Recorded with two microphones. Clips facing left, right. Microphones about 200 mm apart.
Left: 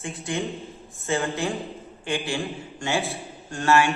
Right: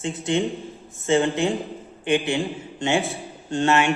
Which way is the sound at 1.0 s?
20° right (ahead or behind).